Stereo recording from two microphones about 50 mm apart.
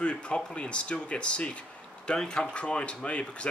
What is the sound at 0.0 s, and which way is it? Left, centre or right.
Speech, left.